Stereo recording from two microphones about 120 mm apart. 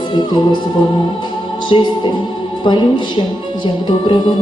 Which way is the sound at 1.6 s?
40° left (ahead or behind).